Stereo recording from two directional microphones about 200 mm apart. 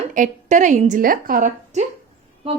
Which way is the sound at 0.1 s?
40° right (ahead or behind).